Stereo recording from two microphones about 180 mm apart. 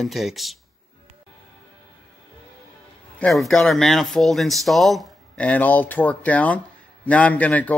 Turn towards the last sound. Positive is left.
turn(degrees=10)  # may be behind; listen again after turning